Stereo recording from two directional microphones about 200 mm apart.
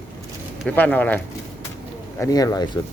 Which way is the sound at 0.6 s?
10° left (ahead or behind).